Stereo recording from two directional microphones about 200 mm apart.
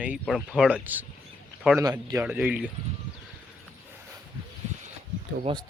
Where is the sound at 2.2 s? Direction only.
5° right (ahead or behind).